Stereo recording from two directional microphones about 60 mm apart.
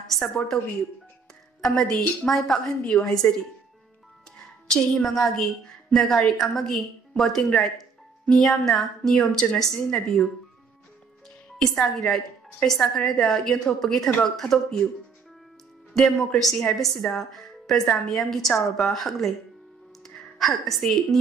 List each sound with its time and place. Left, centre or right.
0.1 s a woman's voice: centre
1.6 s a woman's voice: centre
4.6 s a woman's voice: centre
11.5 s a woman's voice: centre
15.9 s a woman's voice: centre
20.3 s a woman's voice: centre